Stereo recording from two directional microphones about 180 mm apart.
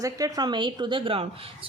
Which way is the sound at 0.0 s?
20° right (ahead or behind).